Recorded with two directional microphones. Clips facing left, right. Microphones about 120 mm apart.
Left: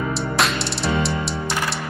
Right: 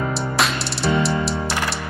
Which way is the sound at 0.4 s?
Centre (ahead or behind).